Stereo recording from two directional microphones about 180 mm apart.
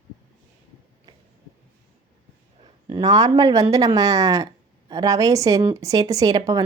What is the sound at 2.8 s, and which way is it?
Speech, 20° right (ahead or behind).